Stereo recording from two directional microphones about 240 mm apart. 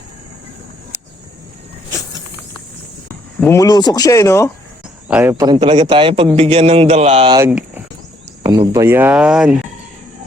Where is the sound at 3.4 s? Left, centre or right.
Centre.